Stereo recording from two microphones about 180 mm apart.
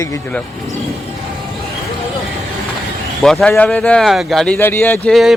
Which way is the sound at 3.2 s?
Centre (ahead or behind).